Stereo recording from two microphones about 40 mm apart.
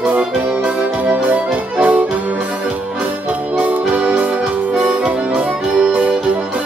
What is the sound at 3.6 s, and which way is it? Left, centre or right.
Music, right.